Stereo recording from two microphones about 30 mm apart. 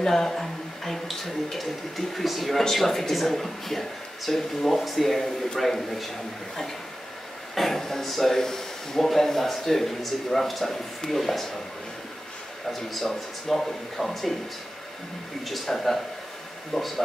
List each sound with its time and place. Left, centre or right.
0.0 s a man's voice: centre
7.5 s a man's voice: centre
13.5 s a man's voice: centre
15.4 s a man's voice: centre